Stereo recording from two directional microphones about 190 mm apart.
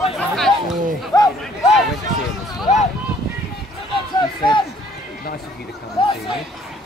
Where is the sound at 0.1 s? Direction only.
Centre (ahead or behind).